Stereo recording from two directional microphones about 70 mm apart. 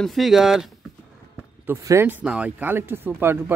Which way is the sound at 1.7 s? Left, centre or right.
Right.